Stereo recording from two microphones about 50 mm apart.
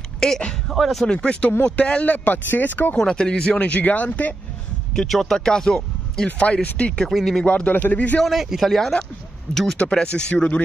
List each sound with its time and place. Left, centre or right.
0.2 s speech: centre
0.7 s a man's voice: centre
1.0 s speech: centre
2.0 s speech: left
3.0 s speech: centre; by 4.4 s left
5.2 s speech: centre
6.2 s speech: left
7.1 s a man's voice: centre
7.4 s speech: left
8.2 s a man's voice: centre
9.8 s speech: left
10.3 s speech: left